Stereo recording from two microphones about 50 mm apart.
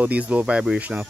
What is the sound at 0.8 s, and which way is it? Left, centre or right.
Speech, right.